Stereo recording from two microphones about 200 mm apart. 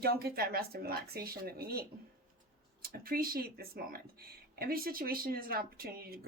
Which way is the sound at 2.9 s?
45° right (ahead or behind).